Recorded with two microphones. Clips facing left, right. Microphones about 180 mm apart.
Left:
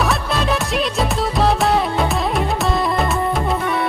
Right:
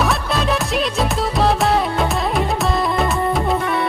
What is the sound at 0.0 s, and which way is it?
Music, centre (ahead or behind).